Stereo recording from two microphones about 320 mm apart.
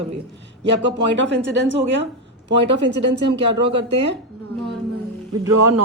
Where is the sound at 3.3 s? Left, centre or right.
Centre.